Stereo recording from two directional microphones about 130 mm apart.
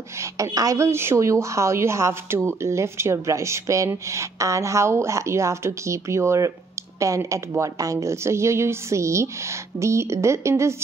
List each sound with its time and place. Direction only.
0.2 s a woman's voice: 25° right (ahead or behind)